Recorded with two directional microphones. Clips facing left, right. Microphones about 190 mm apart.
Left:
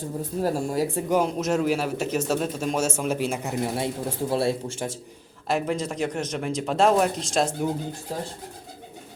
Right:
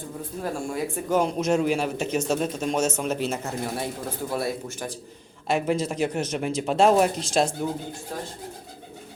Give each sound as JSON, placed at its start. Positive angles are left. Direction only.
{"t": 0.4, "sound": "speech", "side_deg": 35}
{"t": 1.1, "sound": "speech", "side_deg": 5}
{"t": 5.5, "sound": "speech", "side_deg": -5}